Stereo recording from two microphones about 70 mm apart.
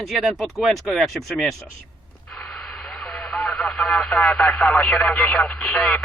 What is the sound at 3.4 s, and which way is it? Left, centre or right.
Speech, centre.